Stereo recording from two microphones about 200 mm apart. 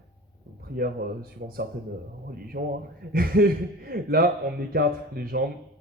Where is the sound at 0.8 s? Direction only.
50° right (ahead or behind).